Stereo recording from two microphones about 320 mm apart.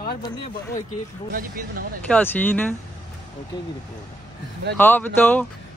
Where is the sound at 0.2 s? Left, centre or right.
Centre.